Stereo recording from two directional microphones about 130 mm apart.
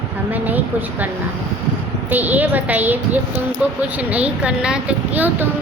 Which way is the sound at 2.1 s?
15° right (ahead or behind).